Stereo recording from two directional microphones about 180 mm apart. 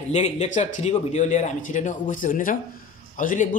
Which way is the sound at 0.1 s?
40° left (ahead or behind).